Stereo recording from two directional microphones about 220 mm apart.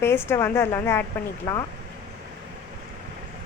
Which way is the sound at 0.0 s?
10° left (ahead or behind).